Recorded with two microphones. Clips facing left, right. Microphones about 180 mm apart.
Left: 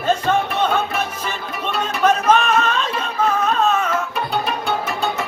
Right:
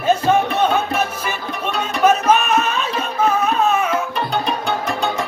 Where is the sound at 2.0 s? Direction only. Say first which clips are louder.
Right 1 dB; 5° right (ahead or behind).